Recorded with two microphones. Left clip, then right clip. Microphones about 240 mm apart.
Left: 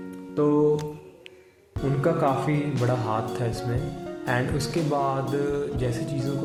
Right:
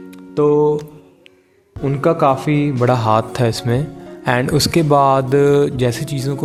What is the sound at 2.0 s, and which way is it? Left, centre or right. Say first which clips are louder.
Speech: right 9 dB; right.